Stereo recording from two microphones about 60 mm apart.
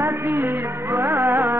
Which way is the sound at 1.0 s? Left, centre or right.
Right.